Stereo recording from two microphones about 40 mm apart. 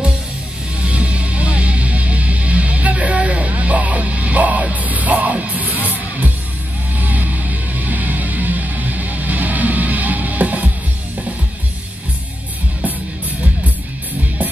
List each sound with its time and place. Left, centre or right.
0.8 s music: right
7.0 s music: right